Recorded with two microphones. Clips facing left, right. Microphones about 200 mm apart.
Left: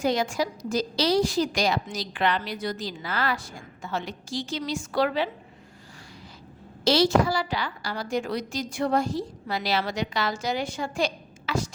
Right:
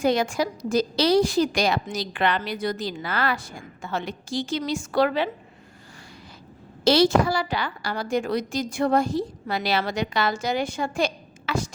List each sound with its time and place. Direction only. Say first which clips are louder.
0.0 s a woman's voice: right 3 dB; 55° right (ahead or behind)
6.8 s a woman's voice: right 2 dB; 55° right (ahead or behind)